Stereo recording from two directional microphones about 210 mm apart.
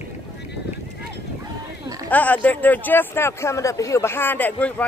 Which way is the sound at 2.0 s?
5° left (ahead or behind).